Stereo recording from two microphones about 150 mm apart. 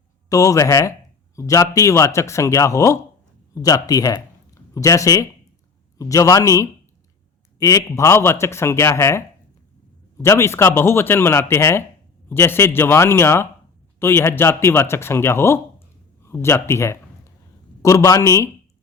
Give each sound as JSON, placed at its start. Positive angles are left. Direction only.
{"t": 0.3, "sound": "a man's voice", "side_deg": 20}